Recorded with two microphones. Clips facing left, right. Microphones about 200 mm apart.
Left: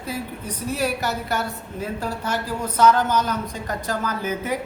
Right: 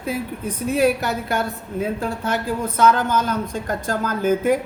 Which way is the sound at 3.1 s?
50° right (ahead or behind).